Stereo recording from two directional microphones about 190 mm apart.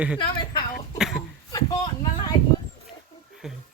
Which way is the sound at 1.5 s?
20° left (ahead or behind).